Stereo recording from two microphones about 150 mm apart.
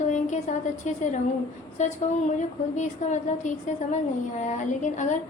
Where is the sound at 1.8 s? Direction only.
50° left (ahead or behind).